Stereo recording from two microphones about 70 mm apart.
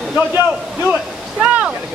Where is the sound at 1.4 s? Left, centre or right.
Centre.